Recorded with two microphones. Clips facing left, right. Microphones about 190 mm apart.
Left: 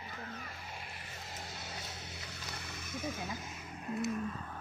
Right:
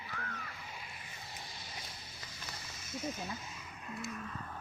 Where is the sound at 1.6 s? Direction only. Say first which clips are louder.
Left 4 dB; 65° left (ahead or behind).